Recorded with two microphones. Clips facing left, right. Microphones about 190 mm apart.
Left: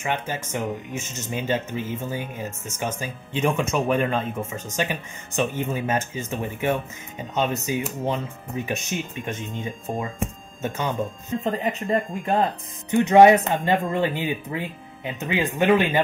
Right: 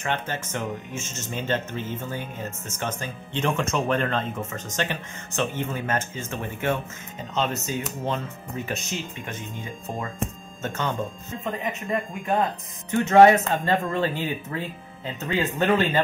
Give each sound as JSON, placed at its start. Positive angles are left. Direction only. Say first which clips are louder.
{"t": 0.0, "sound": "speech", "louder": "left 1 dB", "side_deg": 10}
{"t": 11.4, "sound": "speech", "louder": "left 3 dB", "side_deg": 35}
{"t": 12.9, "sound": "speech", "louder": "left 2 dB", "side_deg": 15}